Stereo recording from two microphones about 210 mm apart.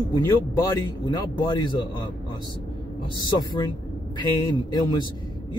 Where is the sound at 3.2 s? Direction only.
20° left (ahead or behind).